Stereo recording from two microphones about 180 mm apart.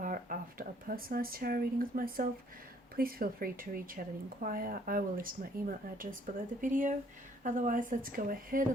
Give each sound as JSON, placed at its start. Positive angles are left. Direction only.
{"t": 0.0, "sound": "speech", "side_deg": -50}